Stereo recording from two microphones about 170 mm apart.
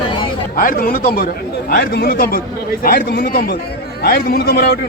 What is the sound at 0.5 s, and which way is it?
Speech, 55° left (ahead or behind).